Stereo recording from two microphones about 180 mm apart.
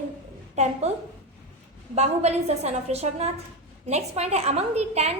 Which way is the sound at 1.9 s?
35° right (ahead or behind).